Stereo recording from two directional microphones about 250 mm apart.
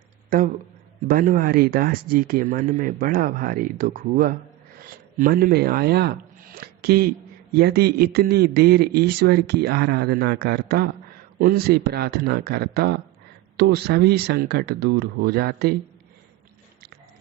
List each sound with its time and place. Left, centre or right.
0.3 s a man's voice: right